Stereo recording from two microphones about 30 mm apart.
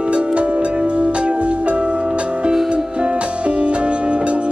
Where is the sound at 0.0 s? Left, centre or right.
Right.